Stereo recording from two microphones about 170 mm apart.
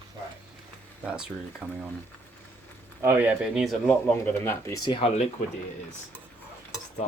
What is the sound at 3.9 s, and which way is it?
Speech, 10° left (ahead or behind).